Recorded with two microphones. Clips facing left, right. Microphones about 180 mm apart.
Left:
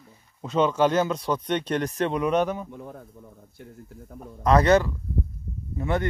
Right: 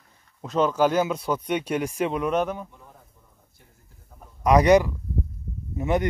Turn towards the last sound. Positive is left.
turn(degrees=-20)  # may be behind; listen again after turning